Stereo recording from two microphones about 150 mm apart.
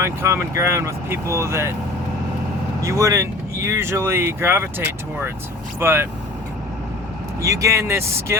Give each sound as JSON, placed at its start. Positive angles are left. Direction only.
{"t": 0.0, "sound": "speech", "side_deg": -15}
{"t": 2.8, "sound": "speech", "side_deg": -20}
{"t": 5.8, "sound": "speech", "side_deg": -15}
{"t": 7.4, "sound": "speech", "side_deg": -20}